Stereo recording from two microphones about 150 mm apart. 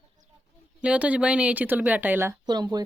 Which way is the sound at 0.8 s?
10° right (ahead or behind).